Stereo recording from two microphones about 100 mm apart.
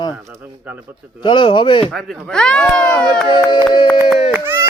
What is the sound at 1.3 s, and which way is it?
Speech, 55° left (ahead or behind).